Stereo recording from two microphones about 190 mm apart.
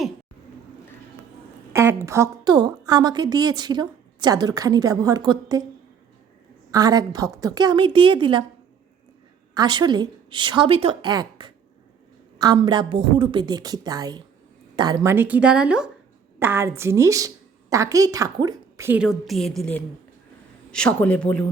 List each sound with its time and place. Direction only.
1.7 s a woman's voice: 15° right (ahead or behind)
6.7 s a woman's voice: 20° right (ahead or behind)
9.6 s a woman's voice: 25° right (ahead or behind)
12.5 s a woman's voice: 25° right (ahead or behind); by 21.4 s 5° left (ahead or behind)